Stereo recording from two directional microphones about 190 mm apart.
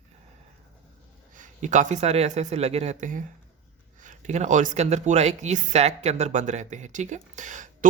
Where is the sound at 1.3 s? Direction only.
40° right (ahead or behind).